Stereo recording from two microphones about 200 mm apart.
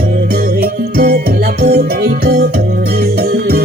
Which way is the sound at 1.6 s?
50° right (ahead or behind).